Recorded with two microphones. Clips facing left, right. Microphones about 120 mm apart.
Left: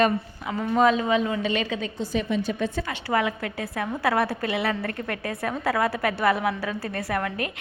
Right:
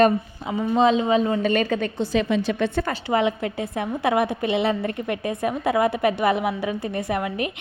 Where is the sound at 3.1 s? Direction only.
25° right (ahead or behind).